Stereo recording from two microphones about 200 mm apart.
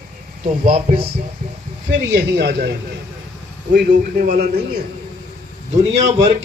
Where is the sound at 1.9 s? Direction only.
55° right (ahead or behind).